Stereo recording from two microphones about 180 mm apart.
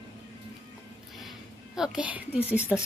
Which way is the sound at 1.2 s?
Centre (ahead or behind).